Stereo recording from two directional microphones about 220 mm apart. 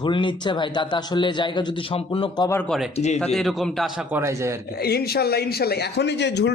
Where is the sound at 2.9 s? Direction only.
30° left (ahead or behind).